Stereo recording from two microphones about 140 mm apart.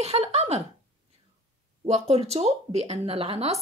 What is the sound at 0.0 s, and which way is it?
Speech, 50° right (ahead or behind).